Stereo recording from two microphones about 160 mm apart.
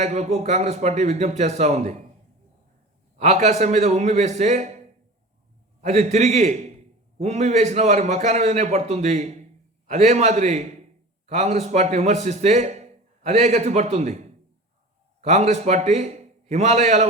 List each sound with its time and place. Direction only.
0.0 s a man's voice: 45° right (ahead or behind)
3.2 s a man's voice: 45° right (ahead or behind)
5.8 s a man's voice: 45° right (ahead or behind)
15.2 s a man's voice: 45° right (ahead or behind)